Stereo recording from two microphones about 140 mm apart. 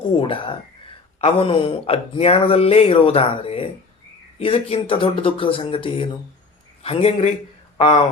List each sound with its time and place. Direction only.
0.2 s speech: 40° left (ahead or behind)